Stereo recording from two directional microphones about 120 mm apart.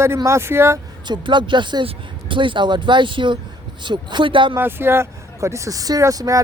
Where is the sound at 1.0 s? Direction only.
40° right (ahead or behind).